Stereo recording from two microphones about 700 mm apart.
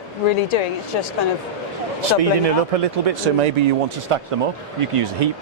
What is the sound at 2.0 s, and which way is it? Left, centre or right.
Speech, right.